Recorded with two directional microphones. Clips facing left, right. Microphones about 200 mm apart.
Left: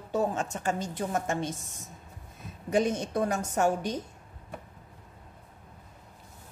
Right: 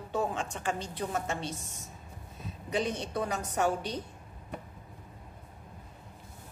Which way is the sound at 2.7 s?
45° left (ahead or behind).